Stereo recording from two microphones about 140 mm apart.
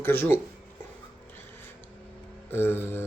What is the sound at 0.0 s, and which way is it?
Speech, 15° left (ahead or behind).